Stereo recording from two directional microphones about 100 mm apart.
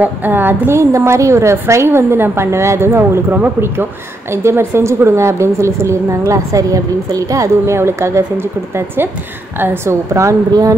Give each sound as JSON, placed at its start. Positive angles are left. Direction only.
{"t": 0.0, "sound": "a woman's voice", "side_deg": -20}